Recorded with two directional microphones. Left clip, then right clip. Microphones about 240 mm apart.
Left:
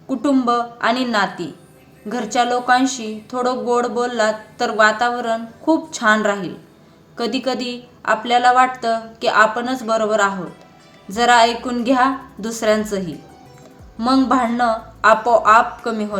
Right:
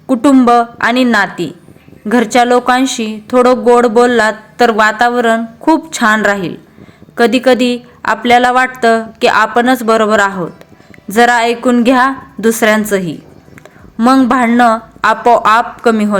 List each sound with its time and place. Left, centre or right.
0.1 s speech: right